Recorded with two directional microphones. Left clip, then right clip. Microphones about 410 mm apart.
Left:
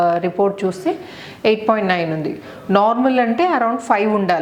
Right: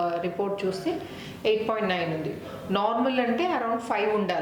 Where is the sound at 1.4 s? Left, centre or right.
Left.